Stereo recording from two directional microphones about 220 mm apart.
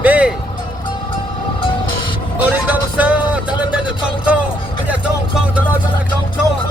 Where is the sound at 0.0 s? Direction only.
5° right (ahead or behind).